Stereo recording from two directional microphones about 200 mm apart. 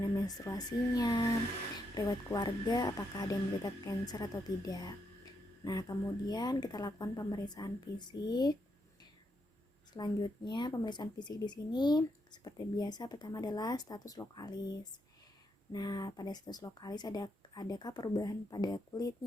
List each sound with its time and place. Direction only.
0.0 s speech: 15° left (ahead or behind)
9.9 s speech: 20° left (ahead or behind)